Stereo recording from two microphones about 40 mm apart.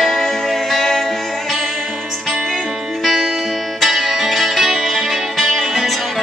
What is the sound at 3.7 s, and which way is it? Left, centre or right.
Music, centre.